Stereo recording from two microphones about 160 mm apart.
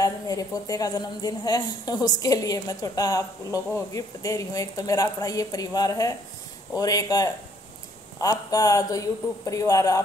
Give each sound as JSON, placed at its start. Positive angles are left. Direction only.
{"t": 0.0, "sound": "a woman's voice", "side_deg": 20}